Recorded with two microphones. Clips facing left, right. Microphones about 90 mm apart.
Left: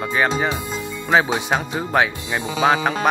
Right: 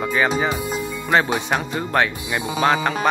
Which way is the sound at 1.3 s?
Centre (ahead or behind).